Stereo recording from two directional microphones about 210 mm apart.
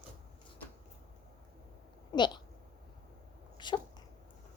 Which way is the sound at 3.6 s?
20° left (ahead or behind).